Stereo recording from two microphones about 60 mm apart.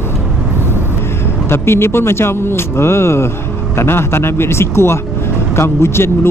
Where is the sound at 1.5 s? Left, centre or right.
Left.